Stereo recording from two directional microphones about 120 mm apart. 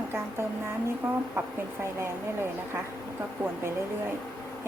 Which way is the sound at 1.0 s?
15° right (ahead or behind).